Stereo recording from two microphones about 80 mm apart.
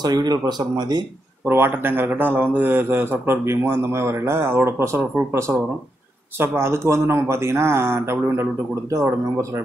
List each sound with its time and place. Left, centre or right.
0.0 s speech: right
1.4 s a man's voice: right